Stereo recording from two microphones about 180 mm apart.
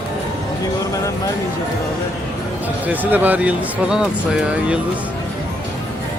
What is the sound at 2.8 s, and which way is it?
Speech, 10° right (ahead or behind).